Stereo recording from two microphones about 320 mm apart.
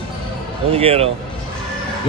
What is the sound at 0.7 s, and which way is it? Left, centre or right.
Speech, centre.